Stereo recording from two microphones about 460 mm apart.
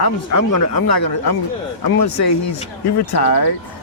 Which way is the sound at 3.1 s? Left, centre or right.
Left.